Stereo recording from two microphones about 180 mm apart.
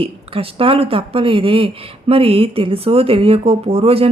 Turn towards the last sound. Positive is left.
turn(degrees=-35)  # may be behind; listen again after turning